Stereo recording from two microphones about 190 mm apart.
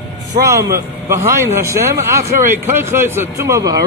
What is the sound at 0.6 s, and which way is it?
A man's voice, 15° right (ahead or behind).